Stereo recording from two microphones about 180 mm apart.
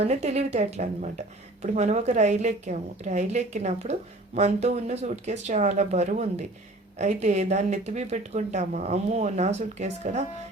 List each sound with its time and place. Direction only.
0.0 s speech: 40° right (ahead or behind)